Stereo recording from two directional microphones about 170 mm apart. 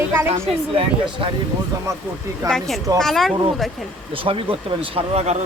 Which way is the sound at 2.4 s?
5° left (ahead or behind).